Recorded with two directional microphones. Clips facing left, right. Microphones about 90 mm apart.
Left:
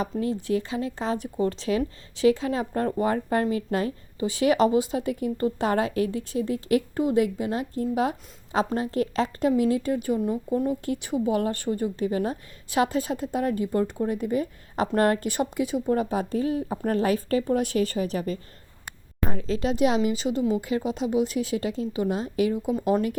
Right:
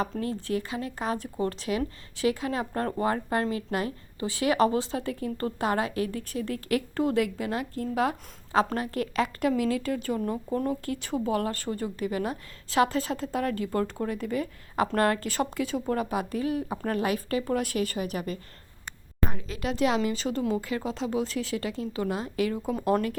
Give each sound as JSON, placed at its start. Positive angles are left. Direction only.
{"t": 0.0, "sound": "a woman's voice", "side_deg": 20}
{"t": 3.0, "sound": "speech", "side_deg": -30}
{"t": 3.8, "sound": "a woman's voice", "side_deg": 25}
{"t": 16.0, "sound": "a woman's voice", "side_deg": 30}
{"t": 17.4, "sound": "a woman's voice", "side_deg": 25}